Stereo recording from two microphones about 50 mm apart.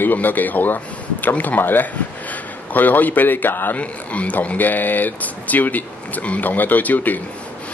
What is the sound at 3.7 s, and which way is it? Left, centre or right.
Speech, left.